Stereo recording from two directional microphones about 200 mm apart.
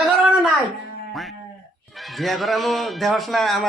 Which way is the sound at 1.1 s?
Centre (ahead or behind).